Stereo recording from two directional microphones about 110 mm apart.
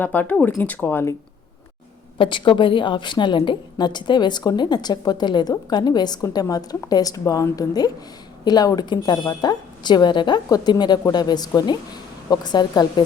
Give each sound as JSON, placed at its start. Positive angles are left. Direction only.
{"t": 0.0, "sound": "speech", "side_deg": 15}
{"t": 2.1, "sound": "a woman's voice", "side_deg": 50}